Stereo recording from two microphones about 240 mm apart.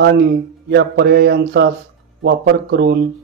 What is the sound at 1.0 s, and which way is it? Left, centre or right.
Speech, right.